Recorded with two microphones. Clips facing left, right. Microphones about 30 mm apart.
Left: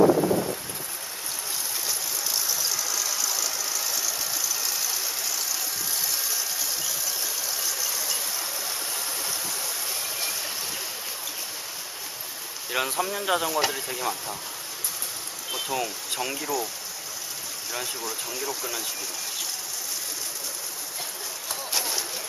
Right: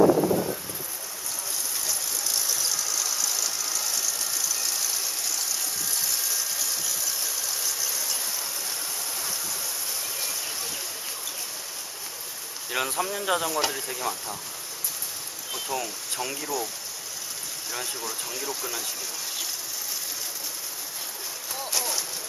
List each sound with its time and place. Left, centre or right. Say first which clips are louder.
1.9 s vehicle: even; centre
12.7 s speech: left 1 dB; centre
15.5 s speech: left 2 dB; centre
17.7 s speech: left 1 dB; centre